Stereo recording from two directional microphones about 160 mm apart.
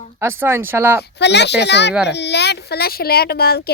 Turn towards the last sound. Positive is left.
turn(degrees=75)  # may be behind; listen again after turning